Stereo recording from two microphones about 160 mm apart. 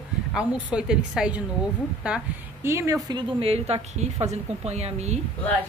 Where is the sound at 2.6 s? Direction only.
20° right (ahead or behind); by 5.2 s 45° right (ahead or behind).